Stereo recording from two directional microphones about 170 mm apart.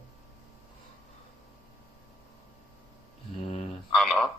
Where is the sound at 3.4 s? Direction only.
40° left (ahead or behind).